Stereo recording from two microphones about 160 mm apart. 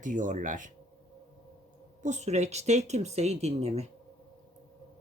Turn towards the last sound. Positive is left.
turn(degrees=-40)  # may be behind; listen again after turning